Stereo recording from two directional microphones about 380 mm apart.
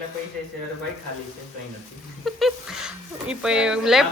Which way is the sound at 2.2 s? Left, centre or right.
Centre.